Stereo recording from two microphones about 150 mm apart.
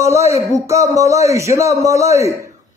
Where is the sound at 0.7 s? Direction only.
20° right (ahead or behind).